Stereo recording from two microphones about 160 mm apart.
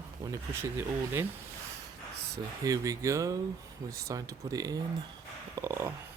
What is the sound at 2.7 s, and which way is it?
Speech, 20° right (ahead or behind).